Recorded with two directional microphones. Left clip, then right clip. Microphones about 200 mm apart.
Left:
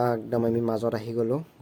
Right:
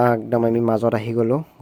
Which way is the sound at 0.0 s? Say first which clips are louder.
Right 7 dB; 35° right (ahead or behind).